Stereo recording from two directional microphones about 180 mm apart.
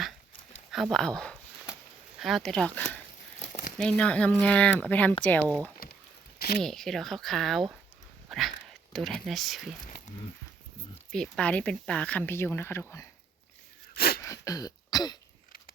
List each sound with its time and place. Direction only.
0.7 s speech: centre (ahead or behind)
1.7 s a sound: 5° right (ahead or behind)
3.4 s crumpling: 40° left (ahead or behind)
3.8 s speech: 5° left (ahead or behind)
5.8 s a sound: 55° left (ahead or behind)
6.6 s speech: centre (ahead or behind)
11.1 s speech: 5° left (ahead or behind)
13.9 s a sound: 60° left (ahead or behind)
14.2 s throat clearing: 20° left (ahead or behind)